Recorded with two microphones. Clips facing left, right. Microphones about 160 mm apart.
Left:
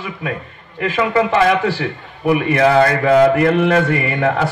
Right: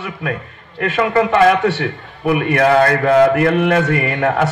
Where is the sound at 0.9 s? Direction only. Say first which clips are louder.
Right 1 dB; 55° right (ahead or behind).